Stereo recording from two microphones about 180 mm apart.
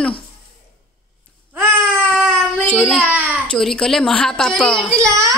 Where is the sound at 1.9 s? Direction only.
Centre (ahead or behind).